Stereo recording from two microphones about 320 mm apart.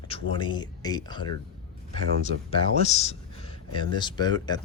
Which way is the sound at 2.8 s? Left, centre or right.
Centre.